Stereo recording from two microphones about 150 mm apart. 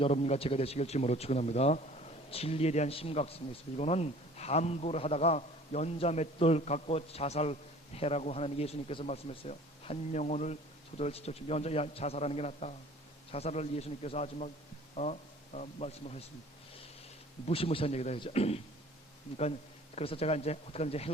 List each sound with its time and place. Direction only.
0.0 s a man's voice: 45° left (ahead or behind)
17.4 s a man's voice: 40° left (ahead or behind)
20.0 s a man's voice: 40° left (ahead or behind)